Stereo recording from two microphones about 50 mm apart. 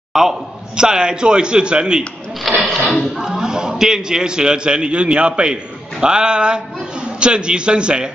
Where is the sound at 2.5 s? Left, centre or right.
Centre.